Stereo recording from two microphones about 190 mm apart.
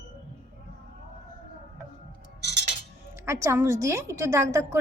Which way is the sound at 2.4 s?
65° right (ahead or behind).